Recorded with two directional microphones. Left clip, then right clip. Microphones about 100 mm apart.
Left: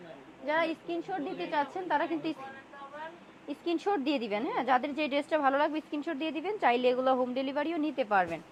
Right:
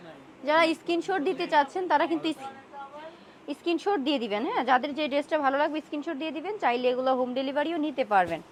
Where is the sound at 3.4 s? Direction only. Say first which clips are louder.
Right 4 dB; 15° right (ahead or behind).